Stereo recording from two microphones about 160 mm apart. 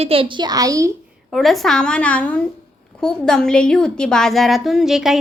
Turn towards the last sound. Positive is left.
turn(degrees=0)  # may be behind; listen again after turning